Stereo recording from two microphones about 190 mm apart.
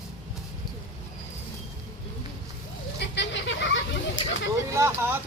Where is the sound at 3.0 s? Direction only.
65° left (ahead or behind).